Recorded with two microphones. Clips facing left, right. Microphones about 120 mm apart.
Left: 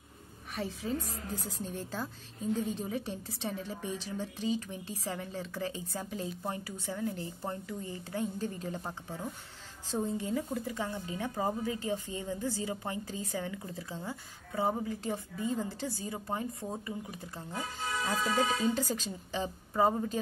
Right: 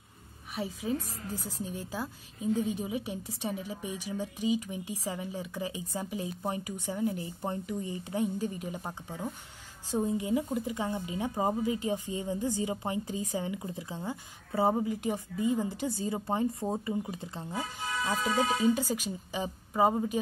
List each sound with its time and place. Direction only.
0.6 s a woman's voice: 10° right (ahead or behind)